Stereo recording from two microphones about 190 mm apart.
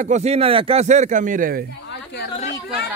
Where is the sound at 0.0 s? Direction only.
35° right (ahead or behind).